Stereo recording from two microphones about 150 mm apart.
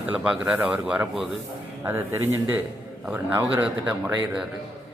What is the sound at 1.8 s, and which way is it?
Speech, 15° right (ahead or behind).